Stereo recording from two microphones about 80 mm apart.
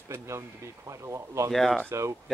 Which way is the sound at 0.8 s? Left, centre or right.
Right.